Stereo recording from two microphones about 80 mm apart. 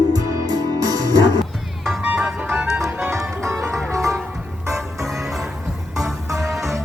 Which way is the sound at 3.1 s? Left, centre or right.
Right.